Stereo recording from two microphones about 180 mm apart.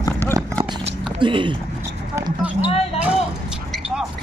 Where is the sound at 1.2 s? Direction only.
25° right (ahead or behind).